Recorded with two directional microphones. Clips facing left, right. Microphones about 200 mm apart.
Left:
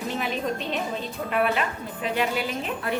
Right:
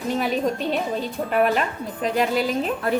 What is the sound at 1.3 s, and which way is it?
A woman's voice, 40° right (ahead or behind).